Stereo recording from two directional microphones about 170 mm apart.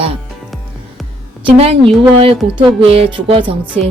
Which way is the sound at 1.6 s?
35° right (ahead or behind).